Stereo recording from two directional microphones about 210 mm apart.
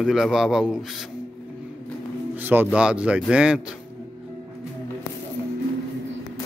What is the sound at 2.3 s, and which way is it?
Speech, 10° right (ahead or behind).